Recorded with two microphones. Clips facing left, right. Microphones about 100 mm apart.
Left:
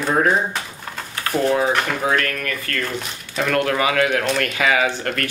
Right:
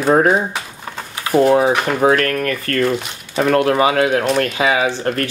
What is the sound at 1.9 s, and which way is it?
Speech, 40° right (ahead or behind).